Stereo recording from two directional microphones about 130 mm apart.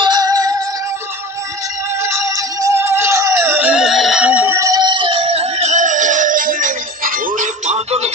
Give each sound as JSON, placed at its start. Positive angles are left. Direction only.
{"t": 0.0, "sound": "music", "side_deg": -30}
{"t": 2.0, "sound": "music", "side_deg": -20}
{"t": 4.6, "sound": "music", "side_deg": -30}